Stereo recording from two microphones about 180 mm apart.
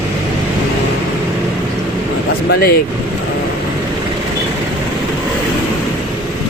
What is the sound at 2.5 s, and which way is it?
Speech, 55° left (ahead or behind).